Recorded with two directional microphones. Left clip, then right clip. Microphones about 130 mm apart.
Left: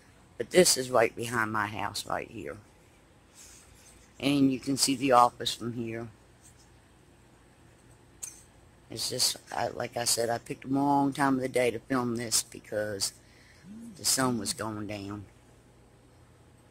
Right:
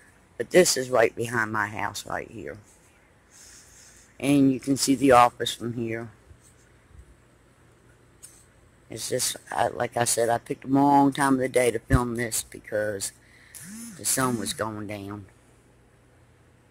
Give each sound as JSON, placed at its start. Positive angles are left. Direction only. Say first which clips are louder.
{"t": 0.4, "sound": "speech", "louder": "right 4 dB", "side_deg": -5}
{"t": 4.2, "sound": "speech", "louder": "right 5 dB", "side_deg": -5}
{"t": 4.7, "sound": "speech", "louder": "right 5 dB", "side_deg": -20}
{"t": 8.8, "sound": "speech", "louder": "right 1 dB", "side_deg": -15}
{"t": 14.2, "sound": "speech", "louder": "right 4 dB", "side_deg": -5}